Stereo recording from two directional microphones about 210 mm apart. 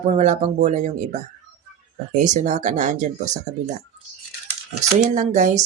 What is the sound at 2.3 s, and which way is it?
Speech, 35° right (ahead or behind).